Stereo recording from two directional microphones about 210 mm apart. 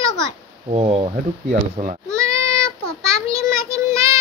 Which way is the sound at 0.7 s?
30° right (ahead or behind).